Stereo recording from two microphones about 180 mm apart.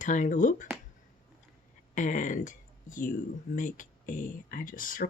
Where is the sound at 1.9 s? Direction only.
45° left (ahead or behind).